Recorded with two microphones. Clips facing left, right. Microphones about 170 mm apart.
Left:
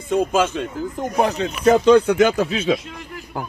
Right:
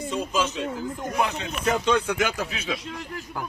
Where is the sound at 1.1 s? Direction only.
35° left (ahead or behind).